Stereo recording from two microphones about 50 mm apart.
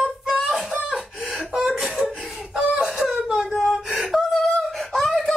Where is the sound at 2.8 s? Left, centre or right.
Centre.